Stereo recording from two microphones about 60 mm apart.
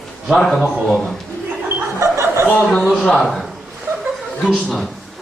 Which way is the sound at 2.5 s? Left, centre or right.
Left.